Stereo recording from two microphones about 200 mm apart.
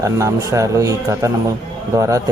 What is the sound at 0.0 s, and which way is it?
A man's voice, 15° right (ahead or behind).